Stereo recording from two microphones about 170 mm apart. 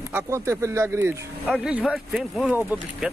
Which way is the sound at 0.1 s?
15° right (ahead or behind).